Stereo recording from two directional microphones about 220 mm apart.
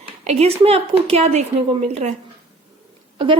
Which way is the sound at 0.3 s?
25° right (ahead or behind).